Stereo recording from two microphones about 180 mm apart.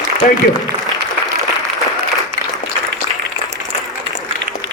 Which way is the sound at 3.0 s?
20° right (ahead or behind).